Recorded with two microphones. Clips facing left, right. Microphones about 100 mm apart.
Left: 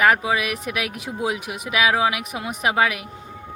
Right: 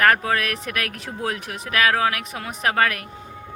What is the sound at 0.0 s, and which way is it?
Speech, 10° left (ahead or behind).